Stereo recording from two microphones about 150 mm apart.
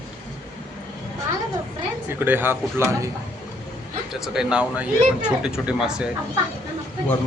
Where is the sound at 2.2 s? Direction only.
15° right (ahead or behind).